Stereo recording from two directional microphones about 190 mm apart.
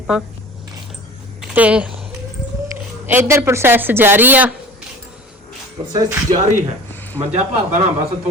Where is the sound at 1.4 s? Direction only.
5° right (ahead or behind).